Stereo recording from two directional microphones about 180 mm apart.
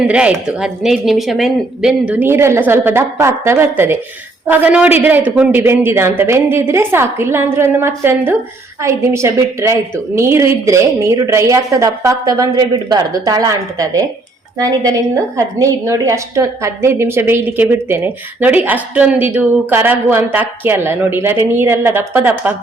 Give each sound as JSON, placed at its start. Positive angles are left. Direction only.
{"t": 0.1, "sound": "a woman's voice", "side_deg": -5}